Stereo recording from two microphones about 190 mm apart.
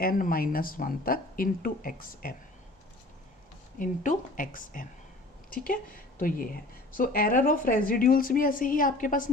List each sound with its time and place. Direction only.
0.0 s a woman's voice: 50° left (ahead or behind)
3.8 s a woman's voice: 45° left (ahead or behind)